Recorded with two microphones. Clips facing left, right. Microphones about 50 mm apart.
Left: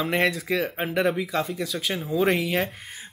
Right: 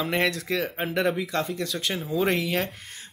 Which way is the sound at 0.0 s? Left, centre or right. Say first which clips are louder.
Left 2 dB; centre.